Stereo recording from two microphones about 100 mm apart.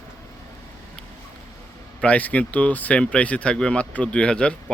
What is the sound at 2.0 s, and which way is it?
Speech, 15° left (ahead or behind).